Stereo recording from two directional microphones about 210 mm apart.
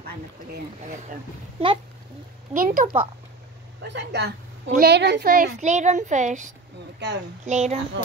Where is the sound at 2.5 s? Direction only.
40° right (ahead or behind).